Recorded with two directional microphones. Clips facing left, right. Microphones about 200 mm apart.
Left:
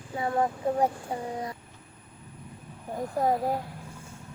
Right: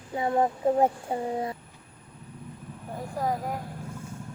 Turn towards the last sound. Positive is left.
turn(degrees=25)  # may be behind; listen again after turning